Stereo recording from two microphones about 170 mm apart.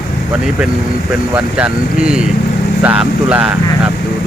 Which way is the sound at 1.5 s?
5° right (ahead or behind).